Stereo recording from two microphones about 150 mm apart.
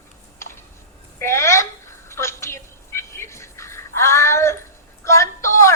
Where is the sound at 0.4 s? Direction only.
20° left (ahead or behind).